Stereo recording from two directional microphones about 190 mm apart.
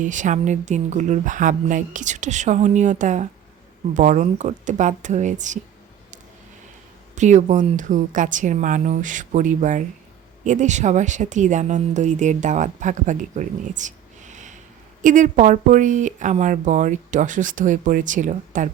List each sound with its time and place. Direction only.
0.0 s speech: 40° right (ahead or behind)
7.2 s speech: 40° right (ahead or behind)